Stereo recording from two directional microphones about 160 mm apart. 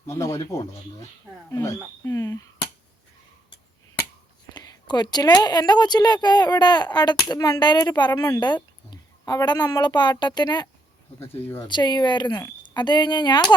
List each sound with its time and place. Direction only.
0.1 s speech: 20° left (ahead or behind)
4.5 s speech: 25° left (ahead or behind)
11.2 s speech: 15° left (ahead or behind)
11.7 s speech: 30° left (ahead or behind)